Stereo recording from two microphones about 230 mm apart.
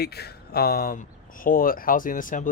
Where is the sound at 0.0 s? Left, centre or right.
Left.